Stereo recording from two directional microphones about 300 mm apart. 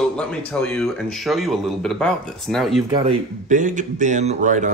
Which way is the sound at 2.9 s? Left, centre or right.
Centre.